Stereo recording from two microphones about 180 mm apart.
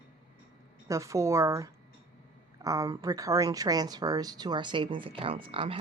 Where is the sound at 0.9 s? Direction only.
15° right (ahead or behind).